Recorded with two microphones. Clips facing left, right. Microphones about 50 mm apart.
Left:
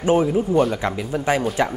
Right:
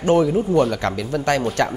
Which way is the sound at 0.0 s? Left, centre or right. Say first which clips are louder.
Right 1 dB; centre.